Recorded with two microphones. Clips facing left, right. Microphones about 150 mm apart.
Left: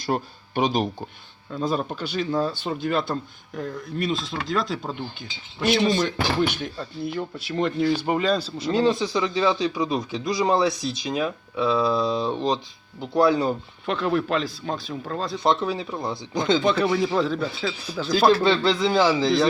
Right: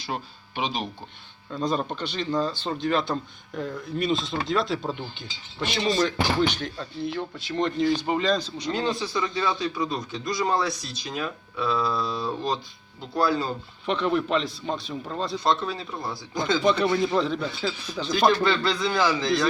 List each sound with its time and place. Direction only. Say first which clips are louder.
0.0 s speech: left 7 dB; 45° left (ahead or behind)
1.5 s speech: left 1 dB; 5° left (ahead or behind)
8.7 s speech: left 6 dB; 25° left (ahead or behind)
13.8 s speech: left 1 dB; centre (ahead or behind)
15.4 s speech: left 4 dB; 20° left (ahead or behind)
16.6 s speech: left 1 dB; 5° left (ahead or behind)
18.4 s speech: left 4 dB; 25° left (ahead or behind)